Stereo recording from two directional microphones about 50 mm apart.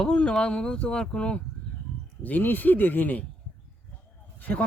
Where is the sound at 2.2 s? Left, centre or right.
Left.